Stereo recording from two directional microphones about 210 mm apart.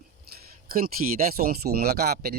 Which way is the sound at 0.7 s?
45° right (ahead or behind).